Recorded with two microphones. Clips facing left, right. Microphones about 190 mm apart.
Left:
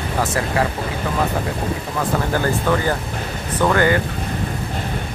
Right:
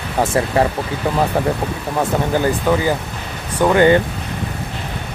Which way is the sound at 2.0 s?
15° right (ahead or behind).